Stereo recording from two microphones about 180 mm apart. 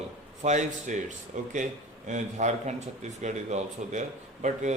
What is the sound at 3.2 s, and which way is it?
Mantra, 40° right (ahead or behind).